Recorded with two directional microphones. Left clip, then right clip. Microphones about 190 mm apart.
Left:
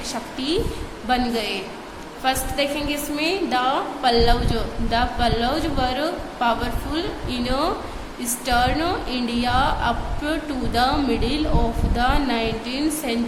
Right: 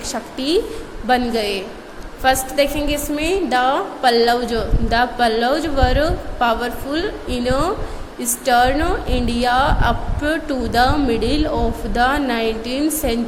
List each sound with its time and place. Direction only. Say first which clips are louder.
0.1 s a woman's voice: right 6 dB; 30° right (ahead or behind)